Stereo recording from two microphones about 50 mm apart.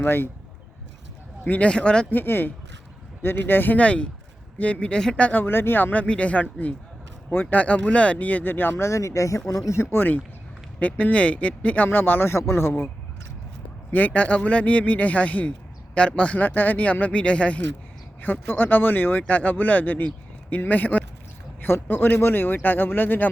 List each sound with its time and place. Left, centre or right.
0.0 s speech: left
1.5 s speech: left
2.0 s speech: left
3.8 s speech: left
5.3 s speech: left
8.7 s speech: left
9.5 s speech: left
10.0 s speech: left
11.9 s speech: left
12.3 s speech: left
13.9 s speech: left
16.6 s speech: left
18.2 s speech: left